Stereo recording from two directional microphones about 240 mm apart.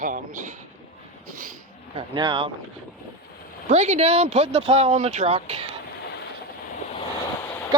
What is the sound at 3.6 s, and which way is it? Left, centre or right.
Speech, right.